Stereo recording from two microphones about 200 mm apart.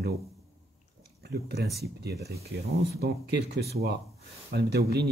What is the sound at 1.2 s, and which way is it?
Speech, 55° right (ahead or behind).